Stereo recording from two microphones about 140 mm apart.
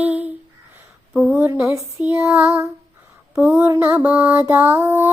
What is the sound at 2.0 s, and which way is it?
Lullaby, 10° right (ahead or behind).